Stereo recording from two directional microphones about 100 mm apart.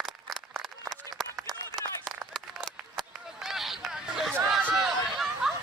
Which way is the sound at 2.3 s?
5° left (ahead or behind).